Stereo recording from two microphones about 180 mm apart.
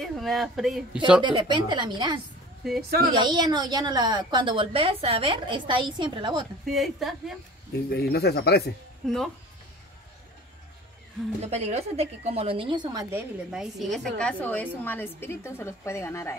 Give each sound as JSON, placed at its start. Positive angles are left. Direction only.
{"t": 0.0, "sound": "speech", "side_deg": 0}
{"t": 1.2, "sound": "a woman's voice", "side_deg": -25}
{"t": 6.6, "sound": "speech", "side_deg": 0}
{"t": 7.7, "sound": "speech", "side_deg": 60}
{"t": 9.0, "sound": "speech", "side_deg": 0}
{"t": 11.4, "sound": "a woman's voice", "side_deg": -35}
{"t": 13.5, "sound": "a woman's voice", "side_deg": 0}